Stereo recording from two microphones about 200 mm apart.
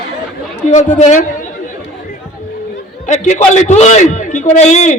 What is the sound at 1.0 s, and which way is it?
Chatter, 35° left (ahead or behind).